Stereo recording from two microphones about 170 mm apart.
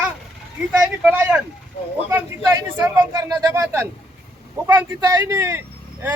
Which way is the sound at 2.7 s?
20° right (ahead or behind).